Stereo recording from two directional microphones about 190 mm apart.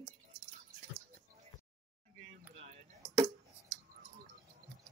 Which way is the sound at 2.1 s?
40° right (ahead or behind).